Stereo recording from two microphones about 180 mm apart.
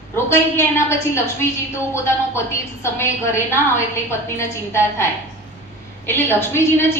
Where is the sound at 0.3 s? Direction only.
15° left (ahead or behind).